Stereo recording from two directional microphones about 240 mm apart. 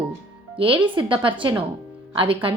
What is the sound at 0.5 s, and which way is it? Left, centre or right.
A woman's voice, right.